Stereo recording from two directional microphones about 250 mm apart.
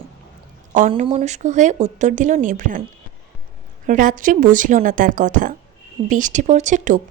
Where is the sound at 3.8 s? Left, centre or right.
Right.